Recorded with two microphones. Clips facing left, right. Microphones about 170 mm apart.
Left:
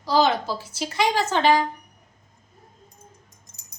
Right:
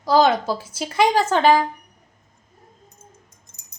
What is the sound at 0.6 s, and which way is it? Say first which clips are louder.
Speech: right 5 dB; 50° right (ahead or behind).